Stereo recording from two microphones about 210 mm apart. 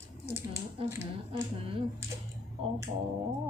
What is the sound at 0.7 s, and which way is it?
Speech, 25° right (ahead or behind).